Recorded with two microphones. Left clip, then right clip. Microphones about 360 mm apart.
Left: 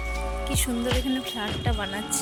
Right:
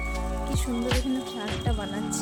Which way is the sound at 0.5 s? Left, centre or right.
Centre.